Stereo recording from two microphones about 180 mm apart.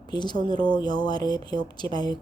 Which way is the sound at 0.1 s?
25° left (ahead or behind).